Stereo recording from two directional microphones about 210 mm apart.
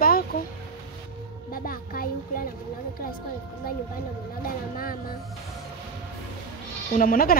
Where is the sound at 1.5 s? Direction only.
45° left (ahead or behind).